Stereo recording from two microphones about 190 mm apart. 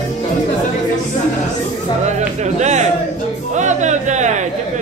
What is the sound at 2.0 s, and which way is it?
Speech, 35° right (ahead or behind).